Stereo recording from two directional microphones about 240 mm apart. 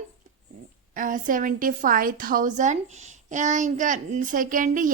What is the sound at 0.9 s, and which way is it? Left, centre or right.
A woman's voice, right.